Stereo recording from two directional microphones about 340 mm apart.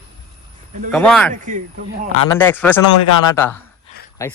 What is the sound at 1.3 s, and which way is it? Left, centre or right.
Speech, right.